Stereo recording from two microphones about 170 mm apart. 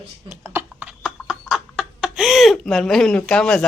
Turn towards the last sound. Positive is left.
turn(degrees=5)  # may be behind; listen again after turning